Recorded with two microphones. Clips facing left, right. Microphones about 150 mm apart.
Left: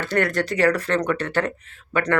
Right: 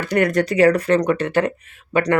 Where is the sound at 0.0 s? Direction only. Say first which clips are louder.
Right 4 dB; 15° right (ahead or behind).